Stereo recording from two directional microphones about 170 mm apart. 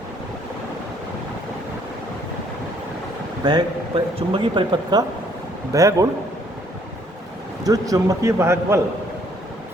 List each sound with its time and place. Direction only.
3.4 s speech: 30° right (ahead or behind)
7.6 s speech: 20° right (ahead or behind)